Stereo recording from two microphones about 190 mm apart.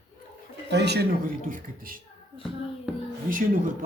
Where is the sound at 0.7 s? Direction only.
60° right (ahead or behind); by 2.0 s 45° right (ahead or behind).